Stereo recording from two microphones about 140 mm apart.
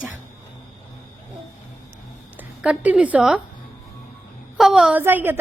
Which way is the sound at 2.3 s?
10° right (ahead or behind).